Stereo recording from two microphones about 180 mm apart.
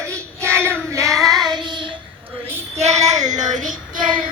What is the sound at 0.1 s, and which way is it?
Child singing, 15° right (ahead or behind).